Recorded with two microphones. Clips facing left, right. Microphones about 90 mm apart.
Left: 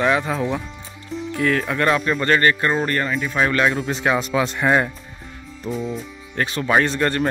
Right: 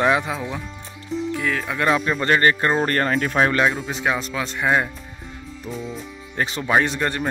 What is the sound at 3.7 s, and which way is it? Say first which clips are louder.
Speech: left 3 dB; centre (ahead or behind).